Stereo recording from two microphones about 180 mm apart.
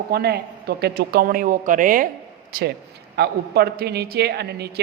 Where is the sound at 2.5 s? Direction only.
60° right (ahead or behind).